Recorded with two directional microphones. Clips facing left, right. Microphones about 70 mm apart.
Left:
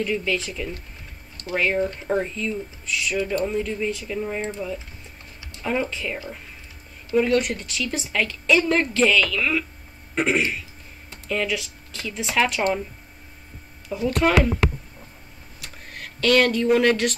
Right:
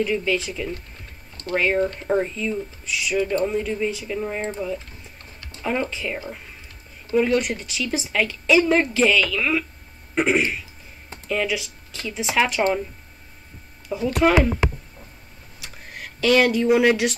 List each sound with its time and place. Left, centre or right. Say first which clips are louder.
0.0 s a woman's voice: right 2 dB; centre
4.4 s speech: right 1 dB; right
5.6 s a woman's voice: even; centre
7.2 s a woman's voice: even; centre
13.8 s a woman's voice: right 2 dB; centre
15.6 s tick-tock: right 1 dB; centre